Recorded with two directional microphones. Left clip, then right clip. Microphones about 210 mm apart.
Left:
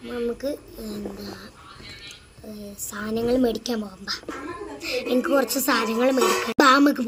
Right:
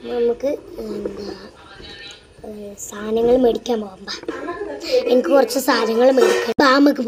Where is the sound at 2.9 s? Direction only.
20° left (ahead or behind).